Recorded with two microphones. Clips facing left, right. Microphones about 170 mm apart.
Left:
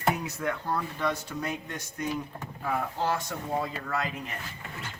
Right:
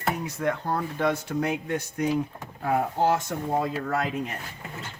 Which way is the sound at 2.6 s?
55° right (ahead or behind).